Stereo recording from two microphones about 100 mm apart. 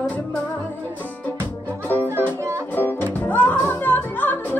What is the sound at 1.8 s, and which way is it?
Music, 20° left (ahead or behind).